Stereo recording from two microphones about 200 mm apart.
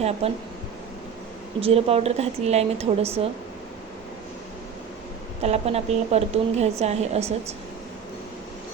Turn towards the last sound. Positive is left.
turn(degrees=-30)  # may be behind; listen again after turning